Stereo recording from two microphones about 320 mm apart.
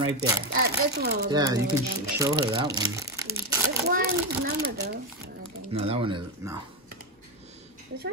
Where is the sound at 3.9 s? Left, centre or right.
Right.